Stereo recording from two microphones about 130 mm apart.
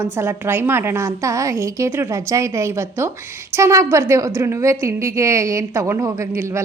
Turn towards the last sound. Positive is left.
turn(degrees=-20)  # may be behind; listen again after turning